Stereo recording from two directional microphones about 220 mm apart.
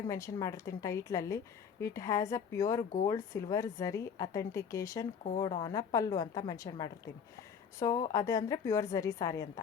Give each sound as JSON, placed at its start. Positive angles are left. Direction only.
{"t": 0.1, "sound": "a woman's voice", "side_deg": 15}